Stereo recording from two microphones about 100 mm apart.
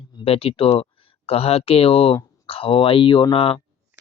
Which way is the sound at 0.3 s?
70° left (ahead or behind).